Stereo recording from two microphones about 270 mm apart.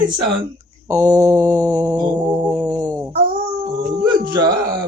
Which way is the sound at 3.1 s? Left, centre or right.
Centre.